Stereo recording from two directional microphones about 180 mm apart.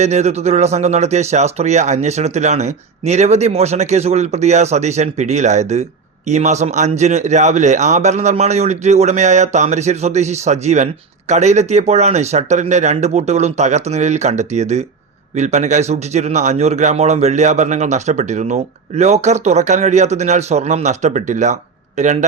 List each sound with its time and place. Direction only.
0.0 s speech: 40° right (ahead or behind)